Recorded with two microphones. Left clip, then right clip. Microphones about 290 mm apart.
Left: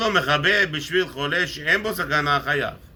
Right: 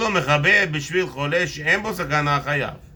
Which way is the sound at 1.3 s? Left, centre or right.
Centre.